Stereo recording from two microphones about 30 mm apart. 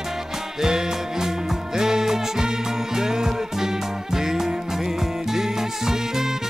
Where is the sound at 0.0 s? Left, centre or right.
Centre.